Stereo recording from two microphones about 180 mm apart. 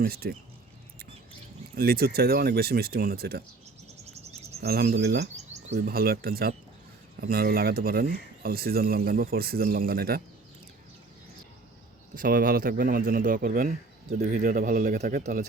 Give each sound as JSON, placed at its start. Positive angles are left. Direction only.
{"t": 0.0, "sound": "speech", "side_deg": -60}
{"t": 1.7, "sound": "speech", "side_deg": -55}
{"t": 4.0, "sound": "insect", "side_deg": -35}
{"t": 4.6, "sound": "speech", "side_deg": -60}
{"t": 12.1, "sound": "a man's voice", "side_deg": -50}